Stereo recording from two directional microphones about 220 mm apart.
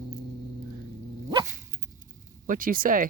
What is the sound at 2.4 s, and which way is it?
Speech, 40° right (ahead or behind).